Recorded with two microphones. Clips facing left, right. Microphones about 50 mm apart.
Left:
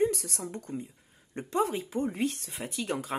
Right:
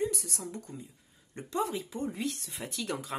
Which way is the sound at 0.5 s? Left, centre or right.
Left.